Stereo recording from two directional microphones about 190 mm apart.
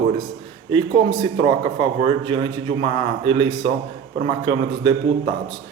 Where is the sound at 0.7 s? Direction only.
25° right (ahead or behind).